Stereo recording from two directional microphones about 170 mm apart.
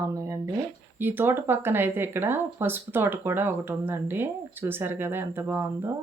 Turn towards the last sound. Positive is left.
turn(degrees=-15)  # may be behind; listen again after turning